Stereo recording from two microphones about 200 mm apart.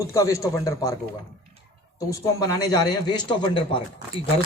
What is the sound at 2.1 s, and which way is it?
A man's voice, 20° left (ahead or behind).